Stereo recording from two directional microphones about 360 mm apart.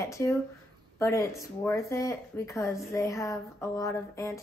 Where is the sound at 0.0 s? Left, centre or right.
Centre.